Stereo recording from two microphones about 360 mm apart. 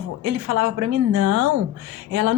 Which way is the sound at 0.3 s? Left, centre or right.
Right.